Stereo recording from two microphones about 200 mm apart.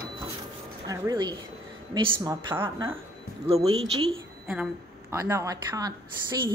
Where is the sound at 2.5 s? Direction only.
10° right (ahead or behind).